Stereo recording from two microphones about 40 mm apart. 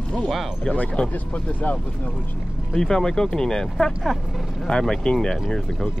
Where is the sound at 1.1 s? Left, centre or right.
Left.